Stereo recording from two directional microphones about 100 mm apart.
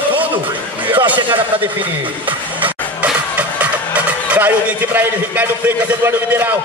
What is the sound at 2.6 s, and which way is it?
Speech, 15° right (ahead or behind).